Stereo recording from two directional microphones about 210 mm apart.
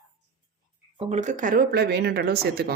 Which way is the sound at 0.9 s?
30° right (ahead or behind).